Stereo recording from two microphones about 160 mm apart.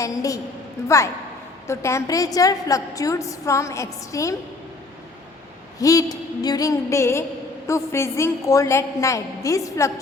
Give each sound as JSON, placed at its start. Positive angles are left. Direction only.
{"t": 0.0, "sound": "a woman's voice", "side_deg": 20}
{"t": 5.8, "sound": "a woman's voice", "side_deg": 20}